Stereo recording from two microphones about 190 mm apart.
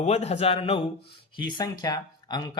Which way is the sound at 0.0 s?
35° left (ahead or behind).